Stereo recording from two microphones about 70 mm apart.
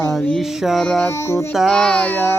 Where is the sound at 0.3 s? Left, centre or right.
Centre.